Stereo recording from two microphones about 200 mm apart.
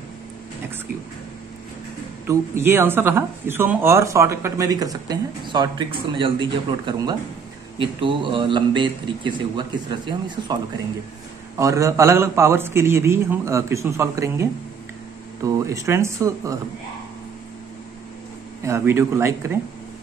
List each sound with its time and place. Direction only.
2.2 s speech: 15° right (ahead or behind)
18.6 s speech: 15° right (ahead or behind)